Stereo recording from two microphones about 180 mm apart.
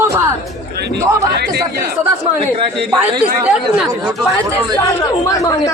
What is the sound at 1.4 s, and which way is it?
Speech, 60° right (ahead or behind).